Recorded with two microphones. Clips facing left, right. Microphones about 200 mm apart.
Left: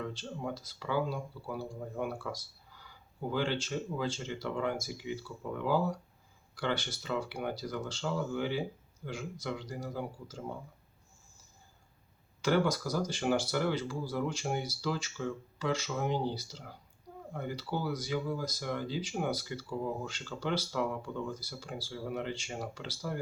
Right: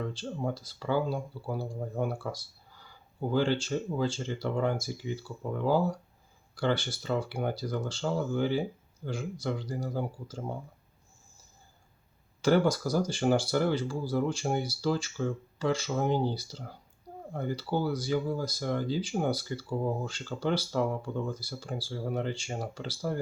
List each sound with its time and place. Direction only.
0.1 s speech: 30° right (ahead or behind)
12.4 s speech: 30° right (ahead or behind)